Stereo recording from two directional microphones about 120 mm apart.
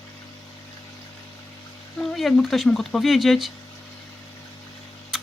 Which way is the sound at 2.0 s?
Centre (ahead or behind).